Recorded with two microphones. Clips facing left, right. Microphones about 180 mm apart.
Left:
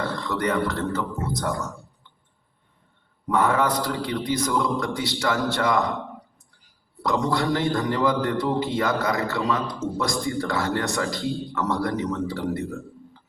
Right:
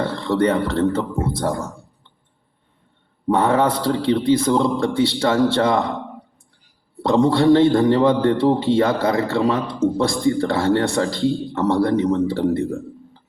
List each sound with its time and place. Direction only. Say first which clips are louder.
0.0 s a man's voice: right 7 dB; 30° right (ahead or behind)
3.2 s a man's voice: right 5 dB; 30° right (ahead or behind)
6.9 s a man's voice: right 7 dB; 30° right (ahead or behind)